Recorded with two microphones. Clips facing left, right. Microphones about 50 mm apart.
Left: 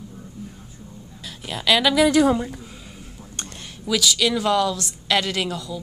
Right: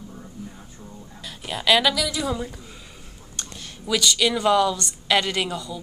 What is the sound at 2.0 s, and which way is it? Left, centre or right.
Speech, left.